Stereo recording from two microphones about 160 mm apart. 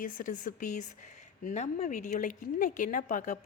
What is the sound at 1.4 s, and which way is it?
Speech, 45° left (ahead or behind).